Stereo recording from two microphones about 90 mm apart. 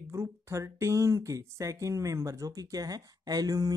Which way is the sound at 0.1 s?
30° right (ahead or behind).